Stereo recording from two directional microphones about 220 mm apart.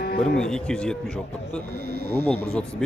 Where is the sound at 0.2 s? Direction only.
5° left (ahead or behind).